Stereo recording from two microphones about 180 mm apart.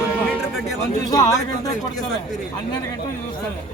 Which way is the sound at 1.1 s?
20° left (ahead or behind).